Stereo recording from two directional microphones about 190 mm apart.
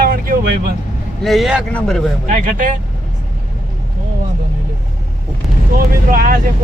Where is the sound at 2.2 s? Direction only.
45° right (ahead or behind).